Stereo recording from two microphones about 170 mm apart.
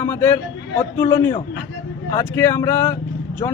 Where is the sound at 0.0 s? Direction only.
15° left (ahead or behind).